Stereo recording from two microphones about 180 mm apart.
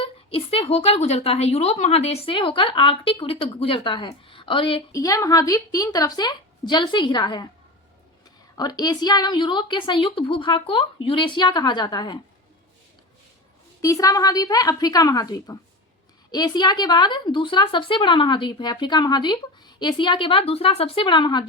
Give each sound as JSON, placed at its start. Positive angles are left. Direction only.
{"t": 0.0, "sound": "a woman's voice", "side_deg": 30}
{"t": 4.9, "sound": "a woman's voice", "side_deg": 20}
{"t": 8.5, "sound": "a woman's voice", "side_deg": 20}
{"t": 13.8, "sound": "a woman's voice", "side_deg": 20}